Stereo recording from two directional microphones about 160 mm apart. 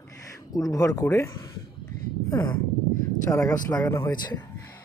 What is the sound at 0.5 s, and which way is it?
Speech, 20° left (ahead or behind).